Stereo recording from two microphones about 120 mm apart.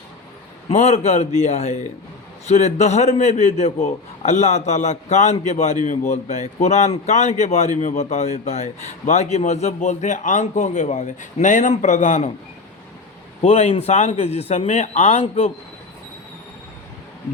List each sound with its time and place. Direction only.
0.7 s a man's voice: 70° left (ahead or behind)
5.8 s a man's voice: 80° left
13.4 s a man's voice: 60° left (ahead or behind)